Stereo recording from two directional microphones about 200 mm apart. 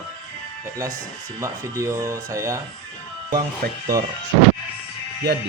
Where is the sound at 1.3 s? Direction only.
15° right (ahead or behind).